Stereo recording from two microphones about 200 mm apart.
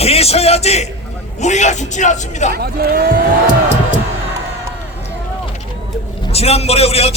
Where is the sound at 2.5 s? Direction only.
50° right (ahead or behind).